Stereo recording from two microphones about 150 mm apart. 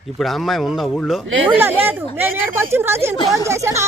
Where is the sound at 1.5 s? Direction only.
15° right (ahead or behind).